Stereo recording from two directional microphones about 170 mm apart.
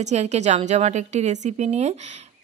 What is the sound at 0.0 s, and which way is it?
A woman's voice, 40° right (ahead or behind).